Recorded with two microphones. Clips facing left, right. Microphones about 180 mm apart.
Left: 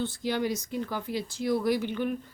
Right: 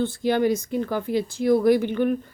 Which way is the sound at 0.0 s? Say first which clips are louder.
Right 8 dB; 55° right (ahead or behind).